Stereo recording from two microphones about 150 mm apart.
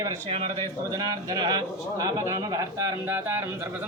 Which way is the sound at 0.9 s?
25° right (ahead or behind).